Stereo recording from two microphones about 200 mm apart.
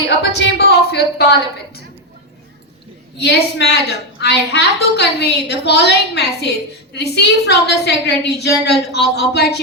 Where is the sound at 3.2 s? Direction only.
60° left (ahead or behind).